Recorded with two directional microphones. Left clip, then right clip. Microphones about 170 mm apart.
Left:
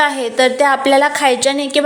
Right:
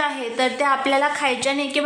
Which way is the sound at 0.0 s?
25° left (ahead or behind).